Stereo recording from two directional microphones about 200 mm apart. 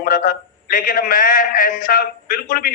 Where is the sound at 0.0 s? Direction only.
45° left (ahead or behind).